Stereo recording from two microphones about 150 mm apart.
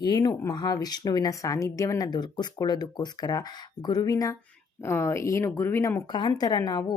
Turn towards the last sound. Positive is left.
turn(degrees=25)  # may be behind; listen again after turning